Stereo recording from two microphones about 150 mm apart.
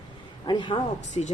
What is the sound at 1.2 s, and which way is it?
Speech, 45° left (ahead or behind).